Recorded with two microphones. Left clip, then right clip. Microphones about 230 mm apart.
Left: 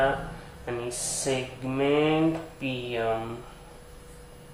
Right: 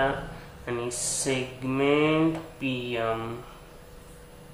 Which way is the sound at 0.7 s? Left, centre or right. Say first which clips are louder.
Right 1 dB; centre.